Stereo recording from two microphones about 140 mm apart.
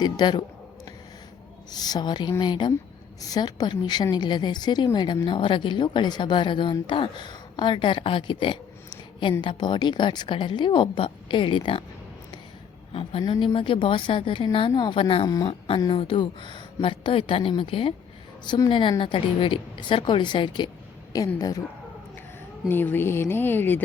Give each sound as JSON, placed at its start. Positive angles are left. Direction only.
{"t": 0.0, "sound": "a woman's voice", "side_deg": 30}
{"t": 1.7, "sound": "a woman's voice", "side_deg": 30}
{"t": 12.9, "sound": "a woman's voice", "side_deg": 45}
{"t": 15.3, "sound": "speech", "side_deg": 25}
{"t": 15.9, "sound": "a woman's voice", "side_deg": 35}
{"t": 22.7, "sound": "speech", "side_deg": 15}